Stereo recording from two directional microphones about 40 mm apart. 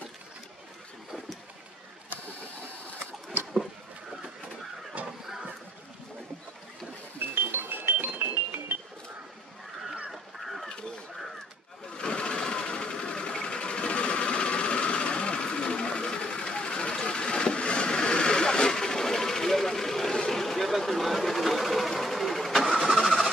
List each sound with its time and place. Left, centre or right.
5.0 s chicken: centre
7.2 s music: right
10.4 s bird: centre
12.0 s sewing machine: left; by 22.7 s centre
22.8 s vehicle: centre